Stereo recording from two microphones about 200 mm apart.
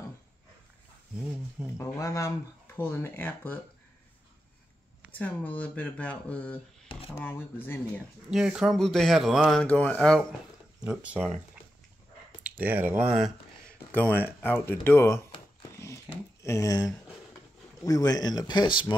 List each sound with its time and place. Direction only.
1.8 s speech: 15° left (ahead or behind)
5.2 s speech: 10° left (ahead or behind)
8.3 s speech: 5° right (ahead or behind)
10.9 s speech: 5° right (ahead or behind)
12.4 s speech: 5° right (ahead or behind)
13.0 s a sound: 5° right (ahead or behind)
13.9 s speech: 10° left (ahead or behind)
16.4 s speech: 15° left (ahead or behind)